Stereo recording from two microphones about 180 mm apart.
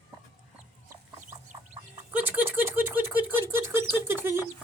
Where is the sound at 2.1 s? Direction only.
10° right (ahead or behind).